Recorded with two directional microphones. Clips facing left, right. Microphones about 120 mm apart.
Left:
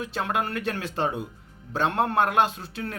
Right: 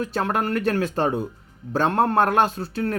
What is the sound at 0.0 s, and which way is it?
Speech, 40° right (ahead or behind).